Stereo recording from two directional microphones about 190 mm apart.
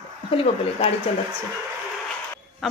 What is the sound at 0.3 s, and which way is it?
Speech, 30° left (ahead or behind).